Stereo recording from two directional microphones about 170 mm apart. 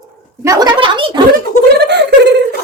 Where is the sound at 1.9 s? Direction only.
90° right.